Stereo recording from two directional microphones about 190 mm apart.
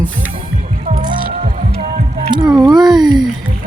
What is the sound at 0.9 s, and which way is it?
Music, 40° right (ahead or behind).